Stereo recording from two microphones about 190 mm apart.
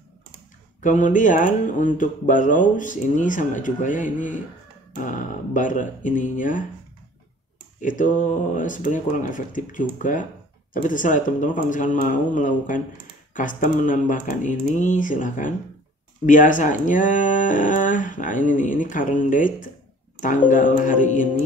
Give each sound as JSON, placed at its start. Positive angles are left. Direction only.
{"t": 0.7, "sound": "speech", "side_deg": 40}
{"t": 7.8, "sound": "speech", "side_deg": 45}